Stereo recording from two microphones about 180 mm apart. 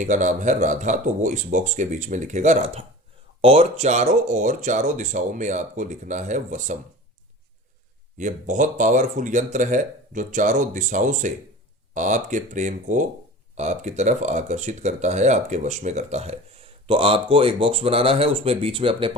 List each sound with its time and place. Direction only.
0.0 s speech: 45° right (ahead or behind)
8.2 s speech: 45° right (ahead or behind); by 19.1 s 30° right (ahead or behind)